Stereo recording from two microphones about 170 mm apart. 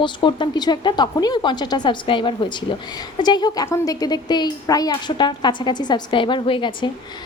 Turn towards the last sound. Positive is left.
turn(degrees=30)  # may be behind; listen again after turning